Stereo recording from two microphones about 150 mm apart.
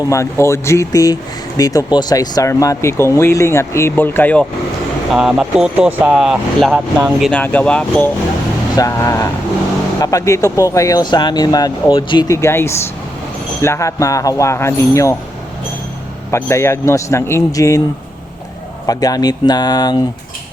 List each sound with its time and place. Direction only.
0.1 s speech: 20° left (ahead or behind)
5.1 s speech: 5° right (ahead or behind)
7.3 s speech: 10° left (ahead or behind)
8.7 s speech: 20° left (ahead or behind)
12.3 s speech: 20° left (ahead or behind)
16.3 s speech: 20° left (ahead or behind)
18.9 s speech: 25° left (ahead or behind)